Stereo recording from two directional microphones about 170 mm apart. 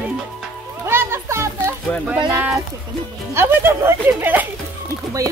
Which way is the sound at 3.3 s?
15° right (ahead or behind).